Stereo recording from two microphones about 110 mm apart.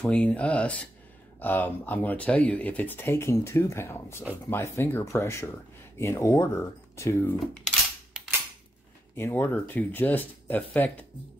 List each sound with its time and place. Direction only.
0.0 s speech: 10° left (ahead or behind)
9.1 s speech: 20° left (ahead or behind)